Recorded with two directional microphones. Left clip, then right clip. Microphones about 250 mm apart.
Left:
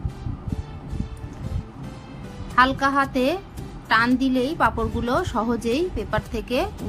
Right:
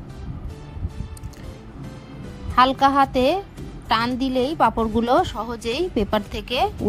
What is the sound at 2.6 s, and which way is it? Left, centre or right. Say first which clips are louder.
A woman's voice: right 3 dB; right.